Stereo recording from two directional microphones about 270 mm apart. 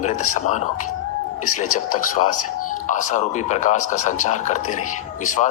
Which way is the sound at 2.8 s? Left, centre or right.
Left.